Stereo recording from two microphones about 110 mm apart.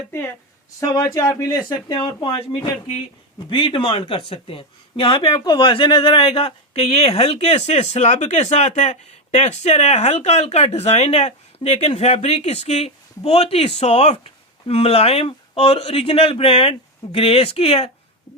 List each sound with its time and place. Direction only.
0.8 s speech: 30° left (ahead or behind)
2.0 s speech: 55° left (ahead or behind)